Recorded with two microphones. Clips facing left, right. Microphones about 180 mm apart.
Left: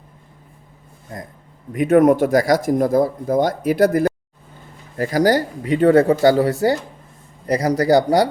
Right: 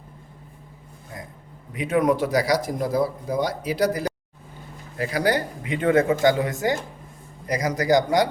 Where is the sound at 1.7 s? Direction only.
50° left (ahead or behind).